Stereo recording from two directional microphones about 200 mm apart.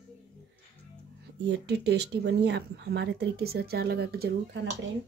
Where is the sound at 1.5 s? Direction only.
55° right (ahead or behind).